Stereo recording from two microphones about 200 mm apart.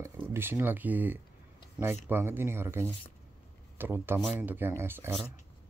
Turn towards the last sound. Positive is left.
turn(degrees=-10)  # may be behind; listen again after turning